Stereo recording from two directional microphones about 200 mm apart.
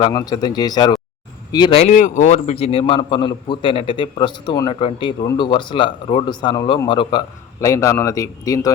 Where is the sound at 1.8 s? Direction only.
40° left (ahead or behind).